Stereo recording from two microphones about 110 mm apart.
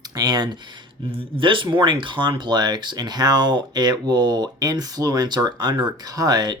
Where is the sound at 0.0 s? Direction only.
35° right (ahead or behind).